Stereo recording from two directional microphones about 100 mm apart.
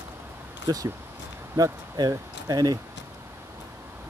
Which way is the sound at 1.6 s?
35° right (ahead or behind).